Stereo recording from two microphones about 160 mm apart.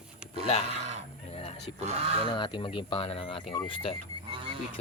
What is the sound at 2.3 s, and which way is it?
Speech, 30° left (ahead or behind).